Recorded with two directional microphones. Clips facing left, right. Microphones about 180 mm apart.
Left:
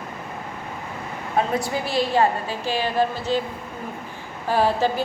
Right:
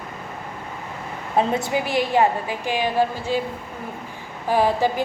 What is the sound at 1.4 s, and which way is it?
A woman's voice, 25° right (ahead or behind).